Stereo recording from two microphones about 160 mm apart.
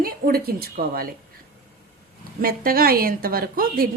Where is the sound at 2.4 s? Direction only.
65° right (ahead or behind).